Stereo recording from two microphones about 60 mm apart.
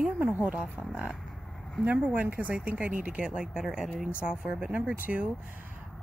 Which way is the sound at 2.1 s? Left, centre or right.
Right.